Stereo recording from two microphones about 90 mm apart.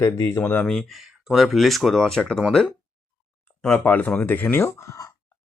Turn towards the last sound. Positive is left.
turn(degrees=40)  # may be behind; listen again after turning